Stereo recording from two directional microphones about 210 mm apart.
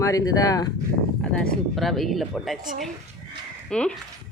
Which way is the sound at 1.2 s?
5° left (ahead or behind).